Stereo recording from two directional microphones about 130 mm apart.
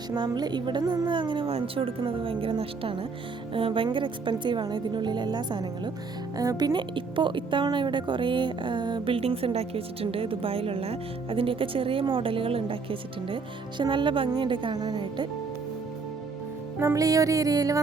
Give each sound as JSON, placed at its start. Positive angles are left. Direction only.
{"t": 0.1, "sound": "speech", "side_deg": -30}
{"t": 16.8, "sound": "music", "side_deg": -25}